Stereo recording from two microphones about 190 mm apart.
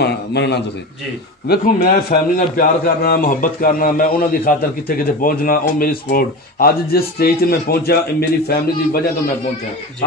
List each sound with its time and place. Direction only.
0.0 s a man's voice: 60° left (ahead or behind)
1.5 s a man's voice: 50° left (ahead or behind)